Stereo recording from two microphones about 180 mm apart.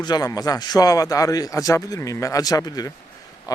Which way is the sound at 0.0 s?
20° left (ahead or behind).